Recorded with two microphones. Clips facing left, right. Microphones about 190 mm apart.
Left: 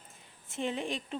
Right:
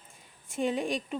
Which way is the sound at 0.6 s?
15° right (ahead or behind).